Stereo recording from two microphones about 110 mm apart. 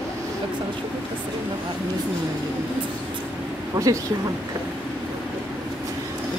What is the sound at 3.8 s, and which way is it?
Speech, 35° right (ahead or behind).